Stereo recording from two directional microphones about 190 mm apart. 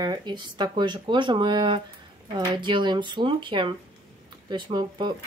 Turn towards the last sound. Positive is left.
turn(degrees=-25)  # may be behind; listen again after turning